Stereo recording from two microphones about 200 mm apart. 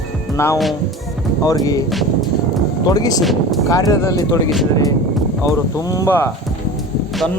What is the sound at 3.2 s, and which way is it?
Music, centre (ahead or behind).